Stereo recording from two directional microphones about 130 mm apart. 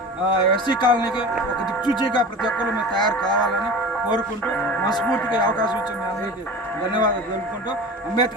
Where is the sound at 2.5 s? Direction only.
10° left (ahead or behind).